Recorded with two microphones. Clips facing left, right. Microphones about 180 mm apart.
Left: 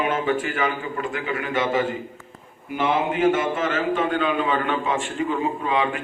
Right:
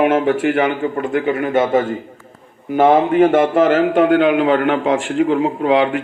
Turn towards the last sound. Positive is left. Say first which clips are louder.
# right 8 dB
turn(degrees=-90)